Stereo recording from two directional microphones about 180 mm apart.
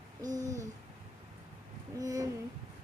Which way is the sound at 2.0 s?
20° right (ahead or behind).